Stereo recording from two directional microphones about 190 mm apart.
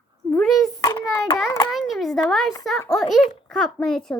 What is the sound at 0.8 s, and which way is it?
Child singing, 20° left (ahead or behind).